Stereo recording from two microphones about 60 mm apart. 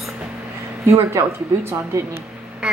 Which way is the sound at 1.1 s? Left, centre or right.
Right.